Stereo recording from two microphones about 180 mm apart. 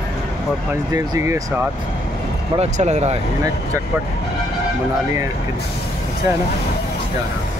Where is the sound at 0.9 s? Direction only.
15° right (ahead or behind).